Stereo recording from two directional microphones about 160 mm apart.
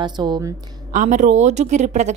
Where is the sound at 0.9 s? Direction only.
50° right (ahead or behind).